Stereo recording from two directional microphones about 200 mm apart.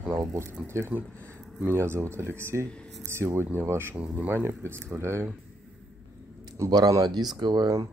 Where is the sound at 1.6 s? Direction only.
10° right (ahead or behind).